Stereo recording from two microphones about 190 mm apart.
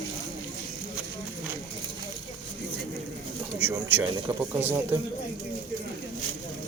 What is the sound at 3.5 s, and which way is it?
Speech, 10° right (ahead or behind).